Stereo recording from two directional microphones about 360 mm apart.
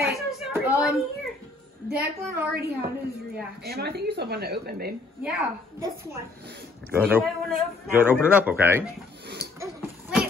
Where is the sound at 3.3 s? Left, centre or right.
Right.